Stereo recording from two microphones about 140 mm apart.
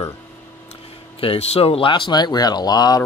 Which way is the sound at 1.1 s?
45° left (ahead or behind).